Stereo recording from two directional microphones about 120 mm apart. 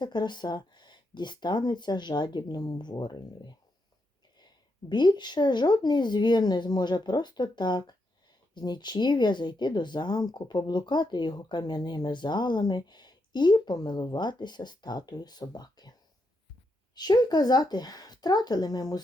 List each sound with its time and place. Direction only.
0.0 s speech: 40° left (ahead or behind)
4.9 s speech: 40° left (ahead or behind)